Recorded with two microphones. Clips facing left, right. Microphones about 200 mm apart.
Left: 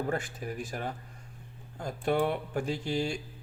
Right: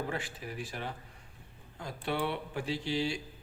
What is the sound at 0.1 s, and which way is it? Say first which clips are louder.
Speech: left 5 dB; 45° left (ahead or behind).